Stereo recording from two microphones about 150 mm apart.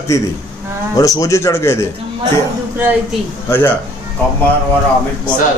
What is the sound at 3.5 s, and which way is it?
Speech, 15° left (ahead or behind).